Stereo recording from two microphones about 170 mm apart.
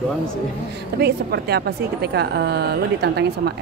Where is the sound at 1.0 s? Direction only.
70° right (ahead or behind).